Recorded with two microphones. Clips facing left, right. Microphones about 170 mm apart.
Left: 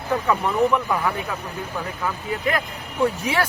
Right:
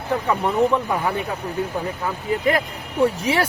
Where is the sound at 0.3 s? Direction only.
25° right (ahead or behind).